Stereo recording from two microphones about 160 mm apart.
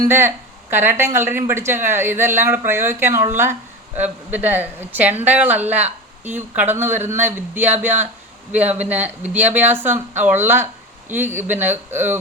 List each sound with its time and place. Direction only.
0.0 s speech: 15° right (ahead or behind)